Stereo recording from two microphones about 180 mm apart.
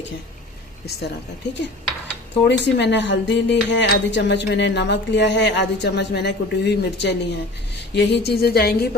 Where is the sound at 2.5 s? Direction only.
75° left (ahead or behind).